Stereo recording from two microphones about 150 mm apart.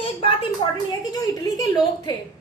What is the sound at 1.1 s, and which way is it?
Speech, 25° left (ahead or behind).